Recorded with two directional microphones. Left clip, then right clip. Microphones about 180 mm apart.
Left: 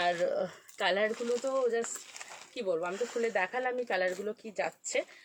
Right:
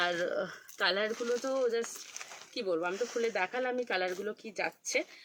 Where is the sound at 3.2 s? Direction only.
15° right (ahead or behind).